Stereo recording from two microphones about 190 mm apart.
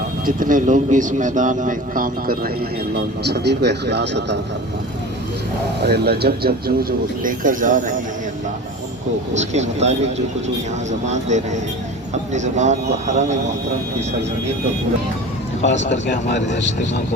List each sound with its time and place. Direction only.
0.3 s a man's voice: 45° right (ahead or behind); by 4.4 s 65° right (ahead or behind)
5.8 s a man's voice: 55° right (ahead or behind)
9.3 s speech: 35° right (ahead or behind)
15.6 s speech: 70° left (ahead or behind)